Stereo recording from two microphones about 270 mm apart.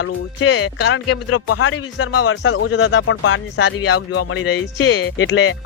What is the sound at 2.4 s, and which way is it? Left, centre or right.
Speech, left.